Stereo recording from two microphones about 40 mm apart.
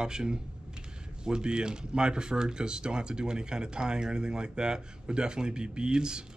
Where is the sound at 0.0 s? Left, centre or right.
Centre.